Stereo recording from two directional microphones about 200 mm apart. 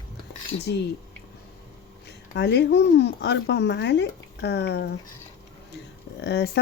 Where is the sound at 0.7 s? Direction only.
60° left (ahead or behind).